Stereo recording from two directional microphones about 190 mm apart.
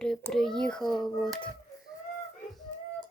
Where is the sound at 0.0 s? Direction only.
5° left (ahead or behind).